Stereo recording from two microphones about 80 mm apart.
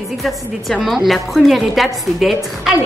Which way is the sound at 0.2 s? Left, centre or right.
Centre.